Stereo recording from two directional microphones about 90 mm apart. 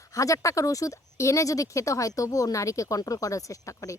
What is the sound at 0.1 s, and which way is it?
Speech, 35° left (ahead or behind).